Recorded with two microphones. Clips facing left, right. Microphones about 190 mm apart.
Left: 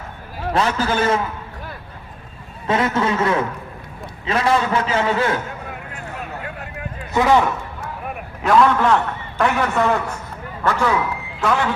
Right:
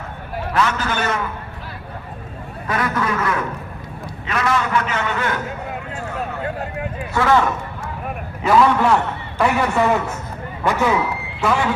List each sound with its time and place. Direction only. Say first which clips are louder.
0.5 s a man's voice: left 2 dB; 30° left (ahead or behind)
2.6 s a man's voice: left 3 dB; 25° left (ahead or behind)
7.1 s a man's voice: left 1 dB; 15° left (ahead or behind)
8.0 s a sound: right 1 dB; 5° right (ahead or behind)
9.4 s a man's voice: right 1 dB; 5° right (ahead or behind)